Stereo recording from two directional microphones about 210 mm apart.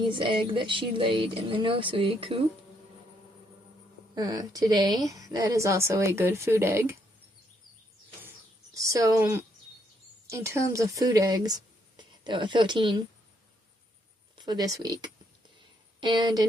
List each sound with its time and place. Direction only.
0.1 s speech: 25° right (ahead or behind)
4.1 s a woman's voice: 20° right (ahead or behind)
8.7 s a woman's voice: 15° right (ahead or behind)
14.3 s speech: 20° right (ahead or behind)
16.0 s speech: 20° right (ahead or behind)